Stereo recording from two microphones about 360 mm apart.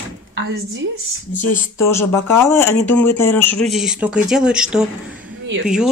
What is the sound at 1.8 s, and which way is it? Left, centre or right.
Speech, centre.